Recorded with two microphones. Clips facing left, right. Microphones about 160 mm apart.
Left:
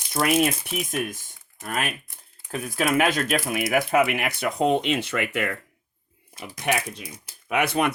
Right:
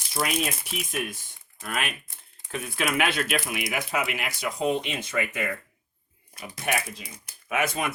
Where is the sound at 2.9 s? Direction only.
40° left (ahead or behind).